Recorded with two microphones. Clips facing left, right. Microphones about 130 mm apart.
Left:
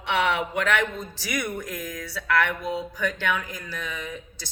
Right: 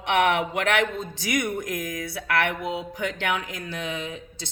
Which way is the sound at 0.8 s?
20° right (ahead or behind).